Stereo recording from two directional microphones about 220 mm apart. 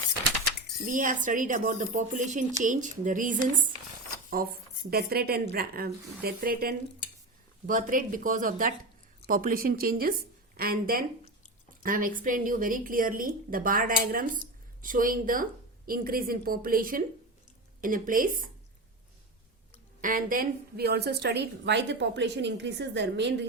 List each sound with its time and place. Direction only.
0.9 s a woman's voice: 35° right (ahead or behind)
4.4 s a woman's voice: 40° right (ahead or behind)
20.0 s a woman's voice: 40° right (ahead or behind)